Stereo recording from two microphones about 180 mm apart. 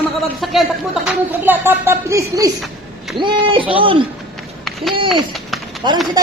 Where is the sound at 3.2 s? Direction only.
30° right (ahead or behind).